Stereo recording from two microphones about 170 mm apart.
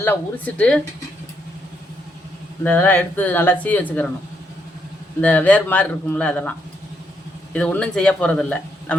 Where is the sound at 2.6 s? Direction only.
10° left (ahead or behind).